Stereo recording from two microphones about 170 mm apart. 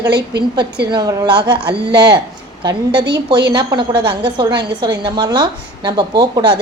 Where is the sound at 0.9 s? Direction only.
25° right (ahead or behind).